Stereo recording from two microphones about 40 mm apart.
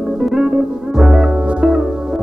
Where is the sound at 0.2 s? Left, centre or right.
Centre.